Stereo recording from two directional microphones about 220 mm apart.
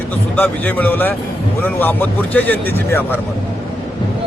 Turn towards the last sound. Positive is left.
turn(degrees=10)  # may be behind; listen again after turning